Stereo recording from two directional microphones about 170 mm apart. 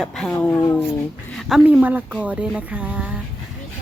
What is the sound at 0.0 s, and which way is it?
Speech, 5° left (ahead or behind).